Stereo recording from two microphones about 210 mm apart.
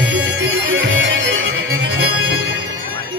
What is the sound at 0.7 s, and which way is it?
Music, 65° right (ahead or behind).